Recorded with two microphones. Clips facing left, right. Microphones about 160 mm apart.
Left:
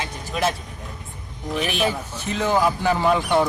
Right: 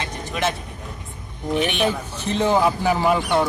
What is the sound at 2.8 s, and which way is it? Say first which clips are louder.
Speech: even; 10° right (ahead or behind).